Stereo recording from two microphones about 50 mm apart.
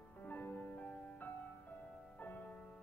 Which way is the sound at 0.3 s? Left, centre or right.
Left.